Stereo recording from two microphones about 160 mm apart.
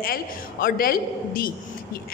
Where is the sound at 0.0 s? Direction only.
65° left (ahead or behind).